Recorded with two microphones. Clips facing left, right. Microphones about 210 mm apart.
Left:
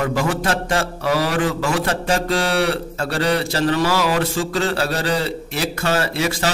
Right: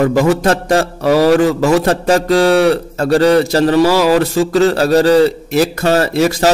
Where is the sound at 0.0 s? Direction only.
40° right (ahead or behind).